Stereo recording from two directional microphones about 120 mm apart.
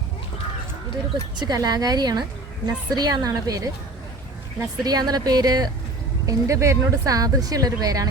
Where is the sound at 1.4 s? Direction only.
35° right (ahead or behind).